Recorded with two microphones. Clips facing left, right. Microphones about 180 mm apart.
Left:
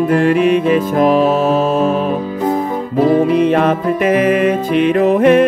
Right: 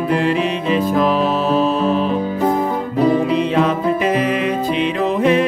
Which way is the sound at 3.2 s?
50° left (ahead or behind).